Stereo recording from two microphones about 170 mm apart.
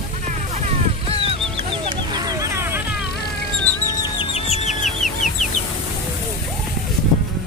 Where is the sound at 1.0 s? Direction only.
35° right (ahead or behind); by 2.8 s 15° right (ahead or behind).